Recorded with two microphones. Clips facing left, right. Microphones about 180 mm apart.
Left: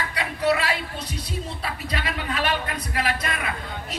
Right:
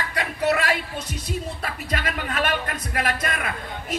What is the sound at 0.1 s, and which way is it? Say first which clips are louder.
Music: even; 50° right (ahead or behind).